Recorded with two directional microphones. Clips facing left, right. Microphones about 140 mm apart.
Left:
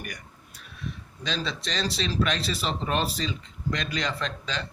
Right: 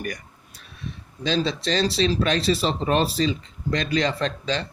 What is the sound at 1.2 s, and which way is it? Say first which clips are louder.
Speech: right 8 dB; 35° right (ahead or behind).